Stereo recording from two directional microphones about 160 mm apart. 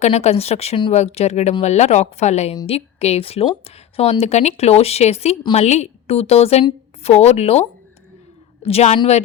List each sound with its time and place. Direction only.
0.0 s a woman's voice: 40° left (ahead or behind)
8.6 s speech: 40° left (ahead or behind)